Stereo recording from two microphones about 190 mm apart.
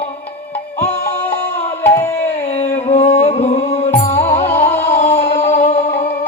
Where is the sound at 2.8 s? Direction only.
35° left (ahead or behind).